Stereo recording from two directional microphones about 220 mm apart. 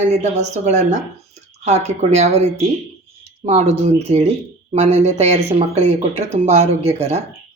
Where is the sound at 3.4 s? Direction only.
30° right (ahead or behind).